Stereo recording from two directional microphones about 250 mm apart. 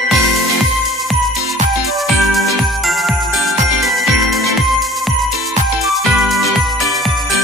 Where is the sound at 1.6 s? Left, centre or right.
Right.